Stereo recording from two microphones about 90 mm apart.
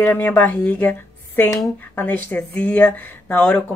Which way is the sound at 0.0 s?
20° left (ahead or behind).